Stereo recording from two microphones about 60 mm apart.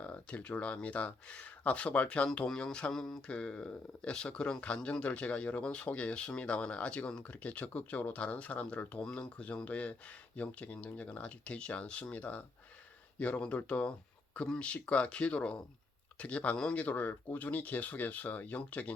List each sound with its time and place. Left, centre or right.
0.0 s speech: left